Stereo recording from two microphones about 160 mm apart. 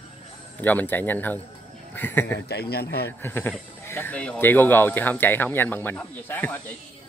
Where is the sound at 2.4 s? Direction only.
80° left.